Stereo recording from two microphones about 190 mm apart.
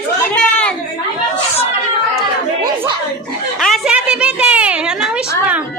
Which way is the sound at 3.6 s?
Centre (ahead or behind).